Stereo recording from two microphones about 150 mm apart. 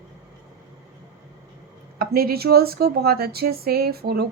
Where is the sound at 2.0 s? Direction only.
90° right.